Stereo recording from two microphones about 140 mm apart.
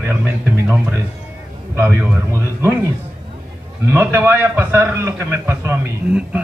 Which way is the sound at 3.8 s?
15° right (ahead or behind).